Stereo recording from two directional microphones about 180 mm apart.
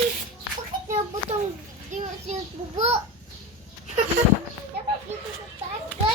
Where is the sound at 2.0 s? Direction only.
35° right (ahead or behind).